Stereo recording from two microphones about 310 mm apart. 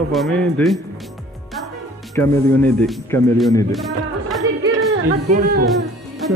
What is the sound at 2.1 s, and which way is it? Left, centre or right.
A man's voice, centre.